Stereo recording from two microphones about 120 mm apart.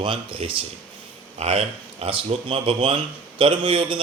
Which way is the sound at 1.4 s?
60° right (ahead or behind).